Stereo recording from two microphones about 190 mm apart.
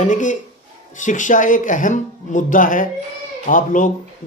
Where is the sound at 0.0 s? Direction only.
40° left (ahead or behind).